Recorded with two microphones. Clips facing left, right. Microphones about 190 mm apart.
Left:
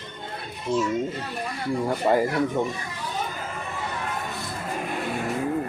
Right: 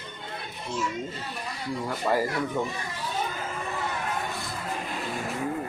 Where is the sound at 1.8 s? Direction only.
20° left (ahead or behind).